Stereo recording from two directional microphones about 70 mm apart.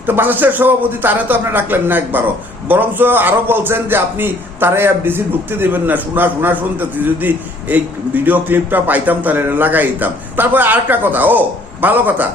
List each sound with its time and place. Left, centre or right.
0.0 s a man's voice: right